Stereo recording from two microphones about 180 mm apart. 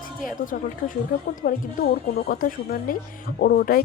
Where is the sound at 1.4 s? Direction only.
50° left (ahead or behind).